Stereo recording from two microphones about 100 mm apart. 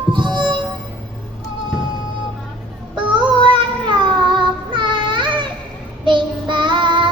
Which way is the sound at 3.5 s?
50° right (ahead or behind).